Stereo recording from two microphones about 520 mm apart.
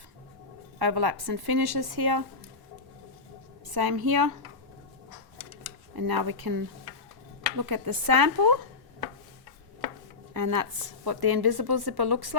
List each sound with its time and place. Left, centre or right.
0.8 s a woman's voice: right
3.8 s a woman's voice: right
6.0 s a woman's voice: right
10.3 s a woman's voice: right